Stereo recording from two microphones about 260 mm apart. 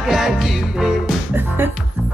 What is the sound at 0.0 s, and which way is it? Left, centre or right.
Music, centre.